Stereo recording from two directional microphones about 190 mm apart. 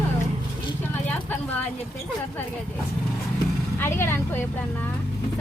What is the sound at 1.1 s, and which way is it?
Speech, 10° left (ahead or behind).